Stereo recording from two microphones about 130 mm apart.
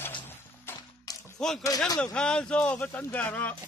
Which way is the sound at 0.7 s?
15° left (ahead or behind).